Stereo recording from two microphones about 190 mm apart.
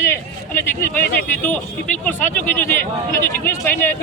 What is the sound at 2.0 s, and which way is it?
Speech, 10° left (ahead or behind).